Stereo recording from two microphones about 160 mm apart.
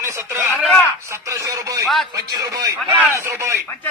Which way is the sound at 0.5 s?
10° left (ahead or behind).